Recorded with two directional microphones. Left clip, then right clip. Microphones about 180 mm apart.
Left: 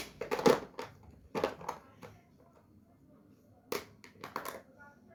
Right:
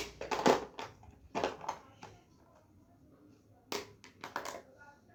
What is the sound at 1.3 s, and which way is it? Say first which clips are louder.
Crushing: left 1 dB; centre (ahead or behind).